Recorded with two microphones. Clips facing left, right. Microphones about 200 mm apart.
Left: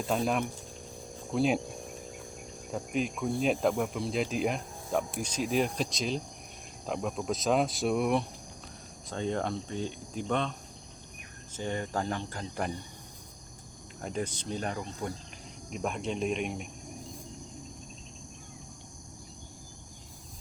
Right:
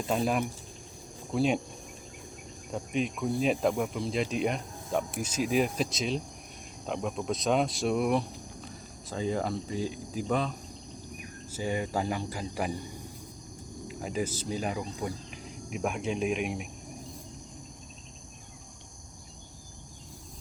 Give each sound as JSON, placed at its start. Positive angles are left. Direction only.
{"t": 0.1, "sound": "speech", "side_deg": -5}
{"t": 2.7, "sound": "speech", "side_deg": 0}
{"t": 11.5, "sound": "speech", "side_deg": -10}
{"t": 13.8, "sound": "speech", "side_deg": -5}